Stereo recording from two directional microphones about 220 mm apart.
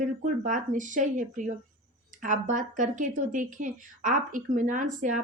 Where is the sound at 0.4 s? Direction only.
35° right (ahead or behind).